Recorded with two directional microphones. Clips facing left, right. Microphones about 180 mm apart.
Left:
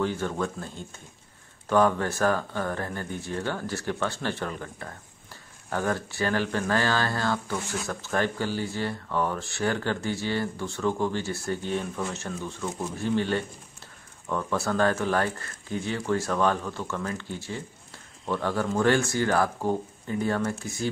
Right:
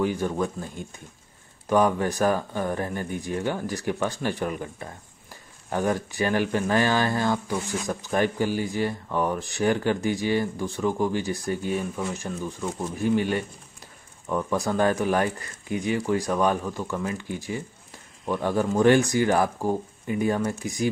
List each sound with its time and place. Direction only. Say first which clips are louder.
0.0 s speech: right 3 dB; 15° right (ahead or behind)